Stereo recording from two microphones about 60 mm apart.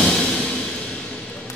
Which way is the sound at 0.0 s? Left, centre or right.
Centre.